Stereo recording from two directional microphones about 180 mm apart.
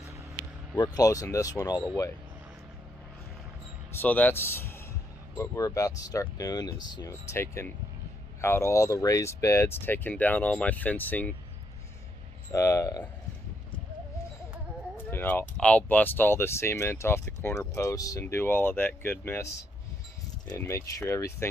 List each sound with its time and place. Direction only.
0.8 s speech: 20° left (ahead or behind)
3.9 s speech: 10° left (ahead or behind)
12.5 s speech: 15° left (ahead or behind)
15.1 s speech: 10° left (ahead or behind)
20.5 s speech: 15° left (ahead or behind)